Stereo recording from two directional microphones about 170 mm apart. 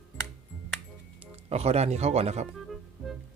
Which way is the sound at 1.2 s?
40° right (ahead or behind).